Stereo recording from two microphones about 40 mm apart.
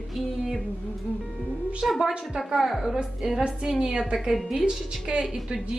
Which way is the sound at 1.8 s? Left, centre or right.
Centre.